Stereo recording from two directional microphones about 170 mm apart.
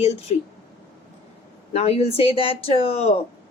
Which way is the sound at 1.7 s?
35° left (ahead or behind).